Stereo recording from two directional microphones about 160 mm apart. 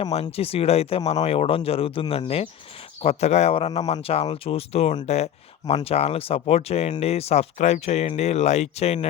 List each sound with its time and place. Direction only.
0.0 s speech: 40° left (ahead or behind)